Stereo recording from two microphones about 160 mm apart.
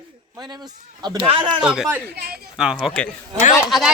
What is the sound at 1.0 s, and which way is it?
Speech, 30° right (ahead or behind).